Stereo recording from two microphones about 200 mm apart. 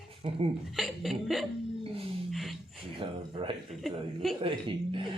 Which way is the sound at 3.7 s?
Centre (ahead or behind).